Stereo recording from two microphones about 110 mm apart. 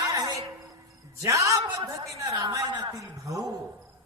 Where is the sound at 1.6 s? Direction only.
45° right (ahead or behind).